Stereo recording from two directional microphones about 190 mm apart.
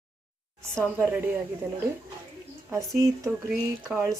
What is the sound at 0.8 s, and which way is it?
Speech, 10° right (ahead or behind).